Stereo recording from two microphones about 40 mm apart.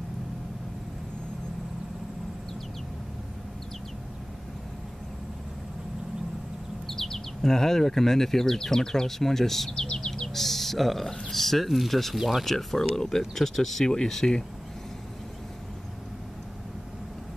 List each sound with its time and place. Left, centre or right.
6.9 s speech: centre
10.0 s bird: centre
10.3 s speech: centre
12.4 s speech: centre